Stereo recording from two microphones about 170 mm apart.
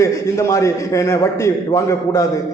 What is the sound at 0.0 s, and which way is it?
A man's voice, 20° left (ahead or behind).